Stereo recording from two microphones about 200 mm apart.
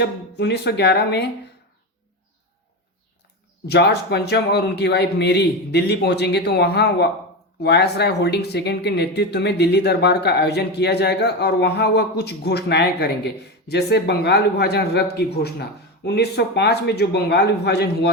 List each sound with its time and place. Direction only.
0.0 s speech: 55° left (ahead or behind)
3.7 s speech: 55° left (ahead or behind)